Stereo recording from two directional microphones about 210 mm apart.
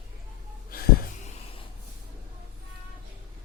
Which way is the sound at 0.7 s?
45° left (ahead or behind).